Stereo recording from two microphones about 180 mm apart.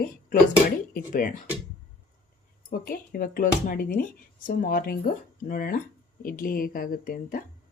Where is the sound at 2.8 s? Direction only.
55° left (ahead or behind).